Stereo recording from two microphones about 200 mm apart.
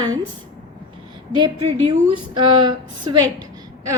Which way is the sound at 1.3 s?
25° right (ahead or behind).